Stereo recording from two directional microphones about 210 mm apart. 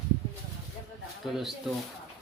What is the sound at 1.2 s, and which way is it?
Speech, centre (ahead or behind).